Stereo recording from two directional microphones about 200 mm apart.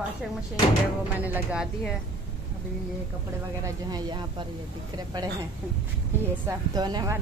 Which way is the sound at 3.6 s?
20° right (ahead or behind).